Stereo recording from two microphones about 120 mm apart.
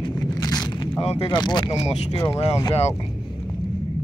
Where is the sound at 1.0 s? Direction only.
60° left (ahead or behind).